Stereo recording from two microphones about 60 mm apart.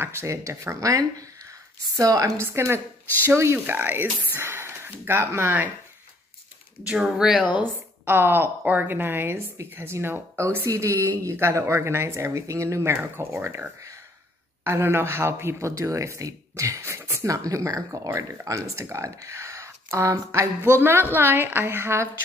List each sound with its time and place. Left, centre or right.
0.0 s speech: right
2.0 s a woman's voice: right
2.4 s speech: right
3.5 s speech: right
7.0 s speech: centre
8.0 s a woman's voice: right
14.6 s speech: right
17.3 s speech: right
18.4 s speech: right